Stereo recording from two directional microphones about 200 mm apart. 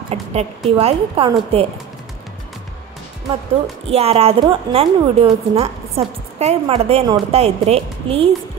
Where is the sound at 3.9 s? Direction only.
30° right (ahead or behind).